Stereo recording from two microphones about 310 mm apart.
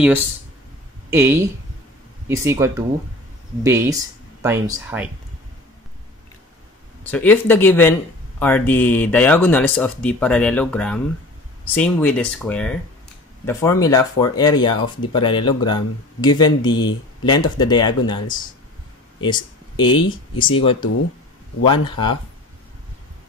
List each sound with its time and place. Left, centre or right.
1.1 s speech: centre
7.0 s speech: centre
19.2 s speech: centre